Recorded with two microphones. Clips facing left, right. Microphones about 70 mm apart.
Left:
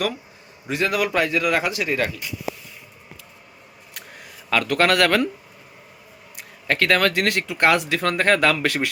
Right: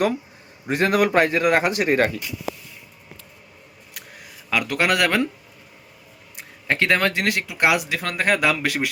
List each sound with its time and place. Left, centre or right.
0.7 s a man's voice: right
3.9 s camera: centre
6.3 s speech: right
7.3 s speech: centre